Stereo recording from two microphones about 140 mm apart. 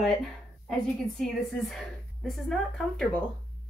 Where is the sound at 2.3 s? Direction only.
Centre (ahead or behind).